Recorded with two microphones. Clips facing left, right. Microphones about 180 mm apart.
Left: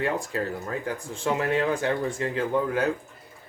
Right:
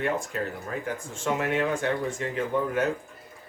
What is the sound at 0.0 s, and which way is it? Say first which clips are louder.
Speech: left 1 dB; 35° left (ahead or behind).